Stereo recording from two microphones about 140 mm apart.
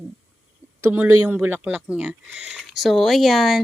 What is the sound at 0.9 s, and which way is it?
Speech, 15° right (ahead or behind).